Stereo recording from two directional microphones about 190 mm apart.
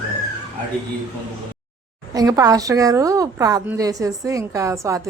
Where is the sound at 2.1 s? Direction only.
20° right (ahead or behind).